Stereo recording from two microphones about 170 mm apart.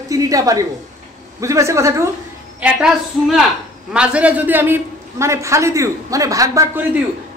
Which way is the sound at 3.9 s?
5° right (ahead or behind).